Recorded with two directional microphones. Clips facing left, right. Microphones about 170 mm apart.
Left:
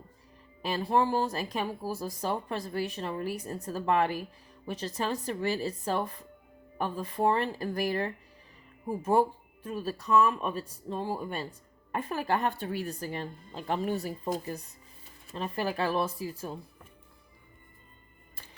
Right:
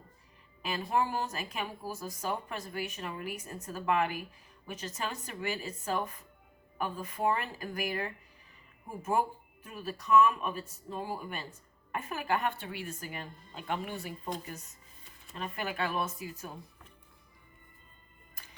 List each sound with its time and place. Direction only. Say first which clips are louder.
0.6 s speech: left 4 dB; 35° left (ahead or behind)